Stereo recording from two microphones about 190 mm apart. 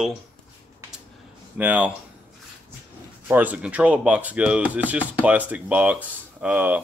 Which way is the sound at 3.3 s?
10° right (ahead or behind).